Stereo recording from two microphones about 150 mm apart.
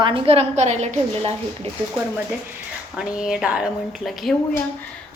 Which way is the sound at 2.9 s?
5° right (ahead or behind).